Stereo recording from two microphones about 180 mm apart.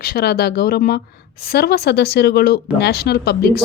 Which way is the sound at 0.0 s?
60° left (ahead or behind).